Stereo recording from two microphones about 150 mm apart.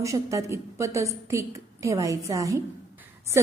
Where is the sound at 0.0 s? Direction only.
20° right (ahead or behind).